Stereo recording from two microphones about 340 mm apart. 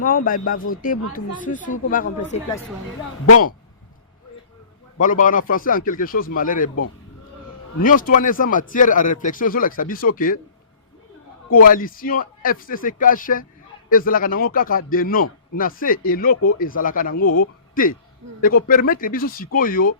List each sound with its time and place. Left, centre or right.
0.0 s speech: left
4.9 s speech: left
7.8 s speech: left
11.5 s speech: left
17.2 s speech: left
18.4 s speech: left